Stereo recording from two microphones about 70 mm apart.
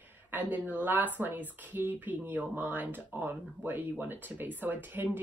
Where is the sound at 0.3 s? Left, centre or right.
Right.